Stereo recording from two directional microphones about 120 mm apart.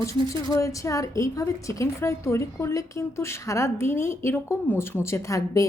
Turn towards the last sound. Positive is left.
turn(degrees=25)  # may be behind; listen again after turning